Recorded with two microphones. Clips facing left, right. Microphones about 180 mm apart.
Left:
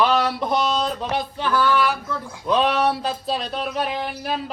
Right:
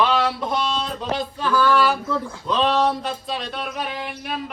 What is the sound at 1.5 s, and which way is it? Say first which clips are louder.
Mantra: right 2 dB; 10° left (ahead or behind).